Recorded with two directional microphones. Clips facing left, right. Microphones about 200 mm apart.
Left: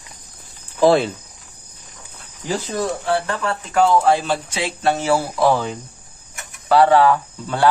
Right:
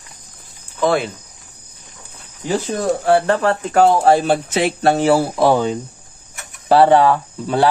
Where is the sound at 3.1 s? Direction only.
45° right (ahead or behind).